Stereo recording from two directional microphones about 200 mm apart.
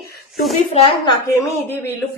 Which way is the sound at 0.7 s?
30° left (ahead or behind).